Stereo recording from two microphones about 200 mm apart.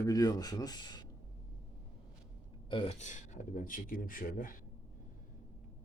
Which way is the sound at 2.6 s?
25° left (ahead or behind).